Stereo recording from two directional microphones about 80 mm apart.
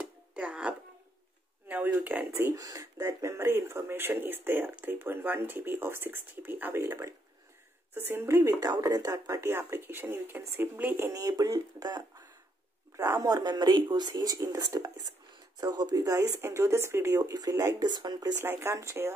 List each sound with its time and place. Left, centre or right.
0.3 s a sound: centre
2.5 s speech: right
6.8 s speech: right
8.5 s speech: right
9.5 s speech: right
11.1 s speech: right
12.9 s speech: right
15.6 s speech: right
17.2 s speech: right
18.4 s speech: right